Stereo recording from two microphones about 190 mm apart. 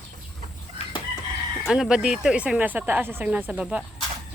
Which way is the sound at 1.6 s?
Centre (ahead or behind).